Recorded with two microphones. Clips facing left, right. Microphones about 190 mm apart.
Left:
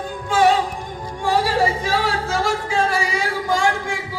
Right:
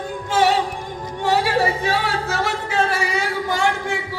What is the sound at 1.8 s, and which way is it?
Music, 60° right (ahead or behind).